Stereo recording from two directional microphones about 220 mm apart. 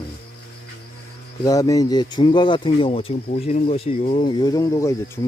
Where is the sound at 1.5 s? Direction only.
15° left (ahead or behind).